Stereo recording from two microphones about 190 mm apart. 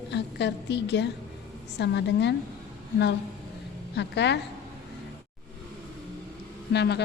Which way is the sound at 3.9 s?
65° left (ahead or behind).